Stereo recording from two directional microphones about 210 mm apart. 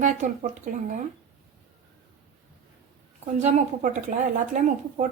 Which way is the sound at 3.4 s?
35° right (ahead or behind).